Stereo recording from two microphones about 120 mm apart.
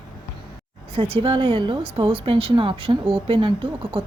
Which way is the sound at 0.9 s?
50° right (ahead or behind).